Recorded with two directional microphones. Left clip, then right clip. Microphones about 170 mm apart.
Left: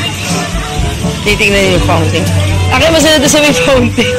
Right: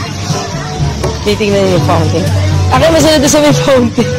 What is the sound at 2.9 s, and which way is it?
Speech, 20° right (ahead or behind).